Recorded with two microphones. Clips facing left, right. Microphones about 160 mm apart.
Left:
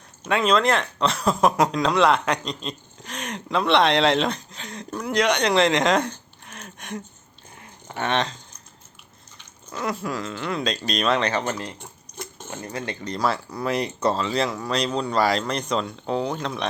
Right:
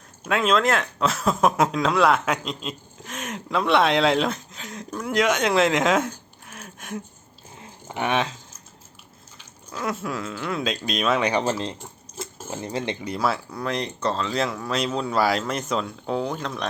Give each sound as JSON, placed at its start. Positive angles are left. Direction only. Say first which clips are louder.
{"t": 0.3, "sound": "speech", "louder": "left 1 dB", "side_deg": 0}
{"t": 9.7, "sound": "speech", "louder": "left 1 dB", "side_deg": 0}
{"t": 11.4, "sound": "speech", "louder": "right 3 dB", "side_deg": -25}
{"t": 13.0, "sound": "speech", "louder": "even", "side_deg": -5}